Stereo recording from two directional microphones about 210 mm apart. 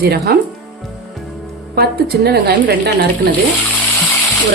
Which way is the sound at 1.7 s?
50° right (ahead or behind).